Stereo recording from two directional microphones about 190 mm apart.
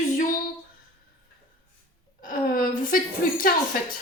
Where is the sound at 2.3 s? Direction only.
45° left (ahead or behind).